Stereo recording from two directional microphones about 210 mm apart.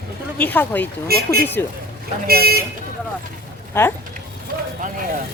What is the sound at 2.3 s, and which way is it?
Speech, 45° right (ahead or behind).